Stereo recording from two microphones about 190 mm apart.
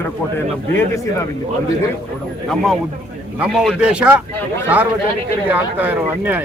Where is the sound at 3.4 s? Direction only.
Centre (ahead or behind).